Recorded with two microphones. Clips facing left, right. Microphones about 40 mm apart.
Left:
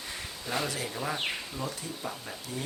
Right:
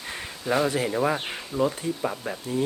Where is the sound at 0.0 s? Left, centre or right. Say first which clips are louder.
Right 6 dB; right.